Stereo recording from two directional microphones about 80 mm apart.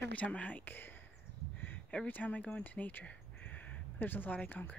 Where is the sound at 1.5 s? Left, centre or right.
Left.